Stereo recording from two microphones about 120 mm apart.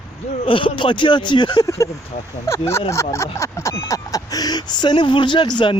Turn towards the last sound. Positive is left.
turn(degrees=40)  # may be behind; listen again after turning